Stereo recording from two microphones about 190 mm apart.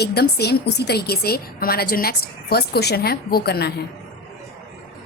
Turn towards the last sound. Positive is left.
turn(degrees=55)  # may be behind; listen again after turning